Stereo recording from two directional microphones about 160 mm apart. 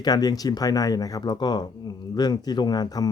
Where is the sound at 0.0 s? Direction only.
25° left (ahead or behind).